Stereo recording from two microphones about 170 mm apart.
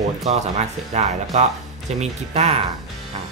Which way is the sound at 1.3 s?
40° right (ahead or behind).